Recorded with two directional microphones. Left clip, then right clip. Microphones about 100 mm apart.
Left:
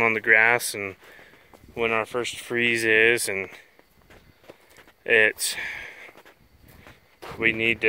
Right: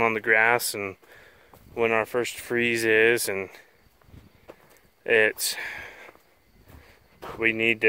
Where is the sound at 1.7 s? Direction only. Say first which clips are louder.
Right 1 dB; 65° right (ahead or behind); by 2.5 s 90° right.